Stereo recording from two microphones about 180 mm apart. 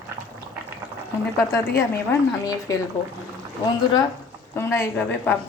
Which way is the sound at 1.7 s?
15° left (ahead or behind).